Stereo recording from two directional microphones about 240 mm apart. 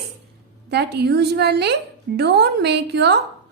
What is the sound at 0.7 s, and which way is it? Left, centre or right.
A woman's voice, right.